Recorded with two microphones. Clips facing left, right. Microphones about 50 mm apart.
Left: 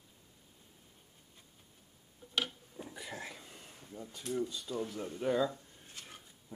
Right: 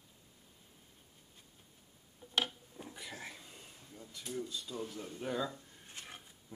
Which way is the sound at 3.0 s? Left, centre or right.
Centre.